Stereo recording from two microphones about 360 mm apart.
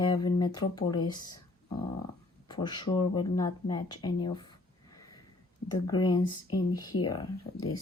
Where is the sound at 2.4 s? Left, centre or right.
Centre.